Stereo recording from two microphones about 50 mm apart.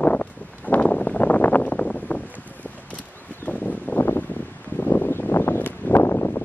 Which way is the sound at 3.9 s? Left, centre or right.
Left.